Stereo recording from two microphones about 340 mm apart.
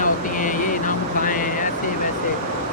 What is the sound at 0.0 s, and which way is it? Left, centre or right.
Vehicle, left.